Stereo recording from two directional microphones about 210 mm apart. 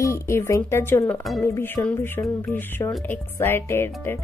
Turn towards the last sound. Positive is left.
turn(degrees=10)  # may be behind; listen again after turning